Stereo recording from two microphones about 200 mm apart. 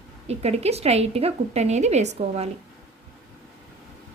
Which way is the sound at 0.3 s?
30° right (ahead or behind).